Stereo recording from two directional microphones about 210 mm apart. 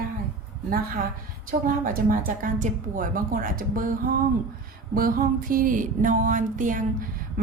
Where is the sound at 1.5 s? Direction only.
40° right (ahead or behind).